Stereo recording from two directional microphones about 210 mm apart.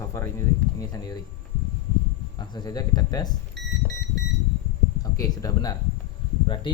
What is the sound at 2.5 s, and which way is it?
Speech, 20° left (ahead or behind).